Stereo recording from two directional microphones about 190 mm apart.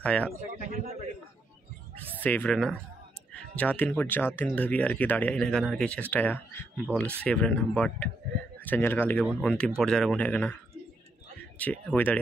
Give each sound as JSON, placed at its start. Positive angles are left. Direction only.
{"t": 0.0, "sound": "speech", "side_deg": 5}
{"t": 0.7, "sound": "a man's voice", "side_deg": -50}
{"t": 2.2, "sound": "speech", "side_deg": 10}